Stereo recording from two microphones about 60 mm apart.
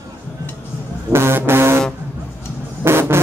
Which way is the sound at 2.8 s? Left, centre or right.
Right.